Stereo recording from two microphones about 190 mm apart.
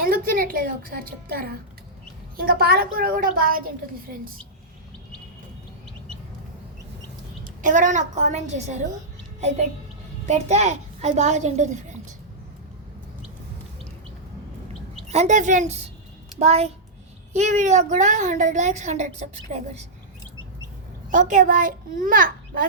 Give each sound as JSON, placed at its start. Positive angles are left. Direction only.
{"t": 0.1, "sound": "a woman's voice", "side_deg": -50}
{"t": 7.4, "sound": "a woman's voice", "side_deg": -45}
{"t": 10.2, "sound": "a woman's voice", "side_deg": -35}
{"t": 15.0, "sound": "a woman's voice", "side_deg": -35}
{"t": 21.1, "sound": "a child's voice", "side_deg": -40}